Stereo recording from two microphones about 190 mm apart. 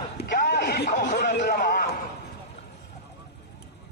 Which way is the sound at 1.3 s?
60° left (ahead or behind).